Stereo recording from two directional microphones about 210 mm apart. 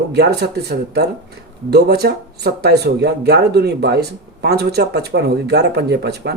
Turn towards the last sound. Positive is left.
turn(degrees=-50)  # may be behind; listen again after turning